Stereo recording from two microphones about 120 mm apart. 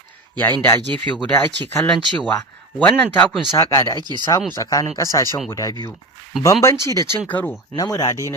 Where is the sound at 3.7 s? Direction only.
30° left (ahead or behind).